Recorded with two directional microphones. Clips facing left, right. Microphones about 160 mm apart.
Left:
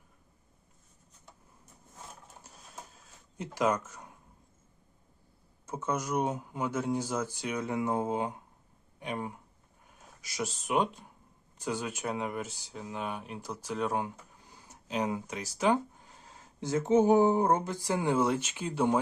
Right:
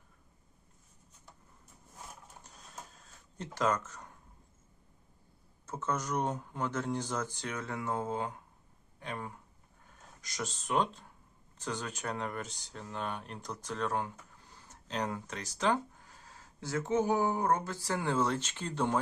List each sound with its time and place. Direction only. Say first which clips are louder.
3.3 s speech: left 3 dB; 10° left (ahead or behind)
5.6 s speech: left 2 dB; 10° left (ahead or behind)